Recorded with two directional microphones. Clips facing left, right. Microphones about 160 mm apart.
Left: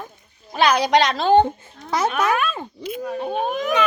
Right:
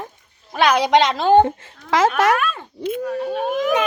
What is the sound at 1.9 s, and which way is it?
Speech, 90° right.